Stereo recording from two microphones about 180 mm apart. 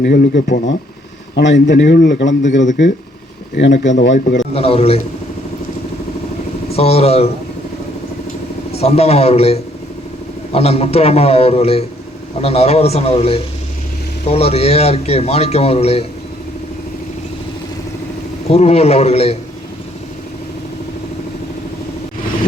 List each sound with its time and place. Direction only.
0.0 s speech: 60° left (ahead or behind)
1.4 s a man's voice: 80° left
4.5 s a man's voice: 35° left (ahead or behind)
6.7 s a man's voice: 35° left (ahead or behind)
8.7 s a man's voice: 35° left (ahead or behind)
18.4 s a man's voice: 35° left (ahead or behind)